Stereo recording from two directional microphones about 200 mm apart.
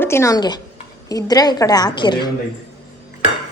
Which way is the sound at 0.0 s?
15° left (ahead or behind).